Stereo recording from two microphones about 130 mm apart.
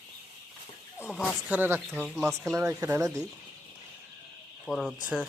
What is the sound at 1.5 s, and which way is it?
Speech, 15° right (ahead or behind).